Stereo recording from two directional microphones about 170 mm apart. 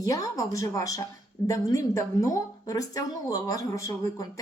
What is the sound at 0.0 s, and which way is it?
A woman's voice, 20° left (ahead or behind).